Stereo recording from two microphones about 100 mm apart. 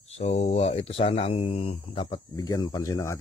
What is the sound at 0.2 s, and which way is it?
Speech, 90° left.